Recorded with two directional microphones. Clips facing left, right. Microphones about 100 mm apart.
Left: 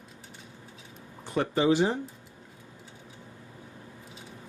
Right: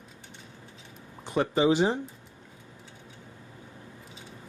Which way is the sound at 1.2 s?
20° right (ahead or behind).